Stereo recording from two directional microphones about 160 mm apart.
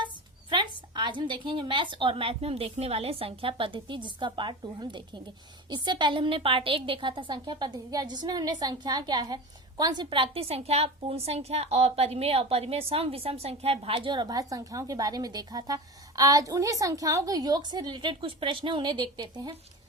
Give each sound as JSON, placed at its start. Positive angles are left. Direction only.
{"t": 0.9, "sound": "a woman's voice", "side_deg": -30}